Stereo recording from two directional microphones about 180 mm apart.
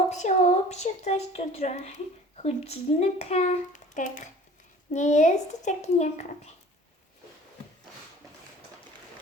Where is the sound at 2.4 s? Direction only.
35° left (ahead or behind).